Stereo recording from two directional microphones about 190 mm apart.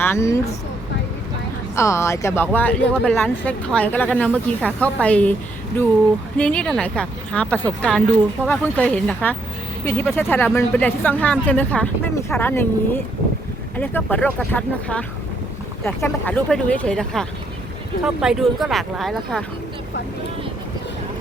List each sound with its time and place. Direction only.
0.0 s speech: 15° left (ahead or behind)
1.7 s speech: 15° left (ahead or behind)